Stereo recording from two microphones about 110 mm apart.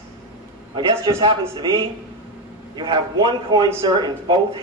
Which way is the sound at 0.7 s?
40° right (ahead or behind).